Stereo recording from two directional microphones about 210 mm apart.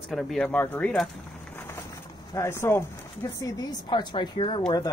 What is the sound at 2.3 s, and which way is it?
Speech, 10° left (ahead or behind).